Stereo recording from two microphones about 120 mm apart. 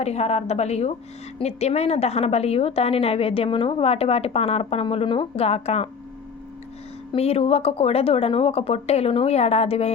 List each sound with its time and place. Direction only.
0.0 s a woman's voice: 60° left (ahead or behind)
7.2 s a woman's voice: 55° left (ahead or behind)